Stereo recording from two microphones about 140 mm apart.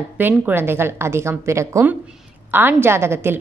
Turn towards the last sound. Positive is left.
turn(degrees=-15)  # may be behind; listen again after turning